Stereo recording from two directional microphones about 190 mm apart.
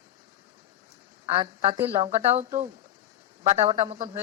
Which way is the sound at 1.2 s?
30° right (ahead or behind).